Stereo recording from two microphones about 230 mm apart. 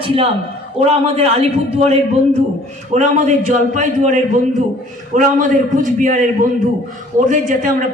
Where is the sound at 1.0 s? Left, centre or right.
Right.